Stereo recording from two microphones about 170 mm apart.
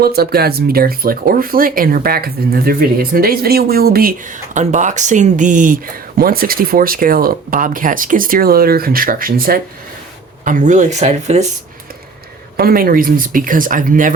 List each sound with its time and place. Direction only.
0.0 s speech: 65° right (ahead or behind)
4.5 s speech: 45° right (ahead or behind)
12.5 s speech: 60° right (ahead or behind)